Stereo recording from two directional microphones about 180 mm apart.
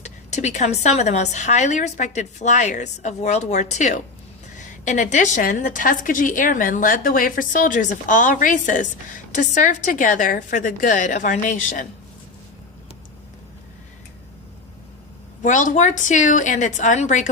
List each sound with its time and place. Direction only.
0.0 s a woman's voice: 40° left (ahead or behind)
15.4 s a woman's voice: 45° left (ahead or behind)